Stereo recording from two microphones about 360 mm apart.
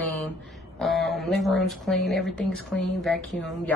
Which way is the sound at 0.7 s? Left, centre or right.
Centre.